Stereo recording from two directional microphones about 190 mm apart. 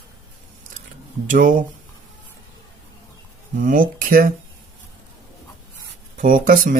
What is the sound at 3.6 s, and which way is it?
Speech, 45° right (ahead or behind).